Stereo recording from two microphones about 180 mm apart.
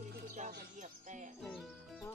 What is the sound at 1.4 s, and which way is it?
Speech, 5° left (ahead or behind).